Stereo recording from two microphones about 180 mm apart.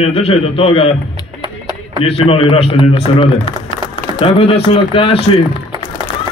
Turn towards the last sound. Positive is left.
turn(degrees=30)  # may be behind; listen again after turning